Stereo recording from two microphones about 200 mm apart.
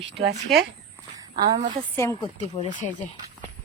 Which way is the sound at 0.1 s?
60° right (ahead or behind).